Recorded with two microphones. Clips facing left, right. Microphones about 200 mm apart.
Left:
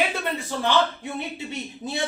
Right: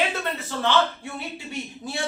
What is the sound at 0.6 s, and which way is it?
A man's voice, 20° left (ahead or behind).